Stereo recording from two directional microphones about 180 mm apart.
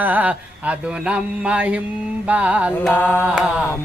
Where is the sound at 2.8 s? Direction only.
10° left (ahead or behind).